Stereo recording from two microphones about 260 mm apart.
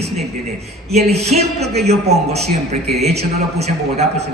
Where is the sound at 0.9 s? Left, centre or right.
Right.